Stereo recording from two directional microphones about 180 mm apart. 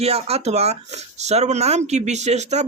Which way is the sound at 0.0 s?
35° right (ahead or behind).